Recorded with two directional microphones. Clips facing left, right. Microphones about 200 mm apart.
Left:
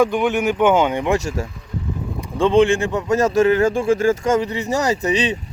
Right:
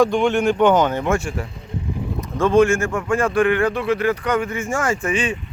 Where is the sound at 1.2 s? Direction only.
40° left (ahead or behind).